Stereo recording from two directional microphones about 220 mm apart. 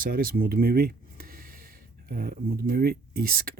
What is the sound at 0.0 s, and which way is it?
Speech, 40° right (ahead or behind).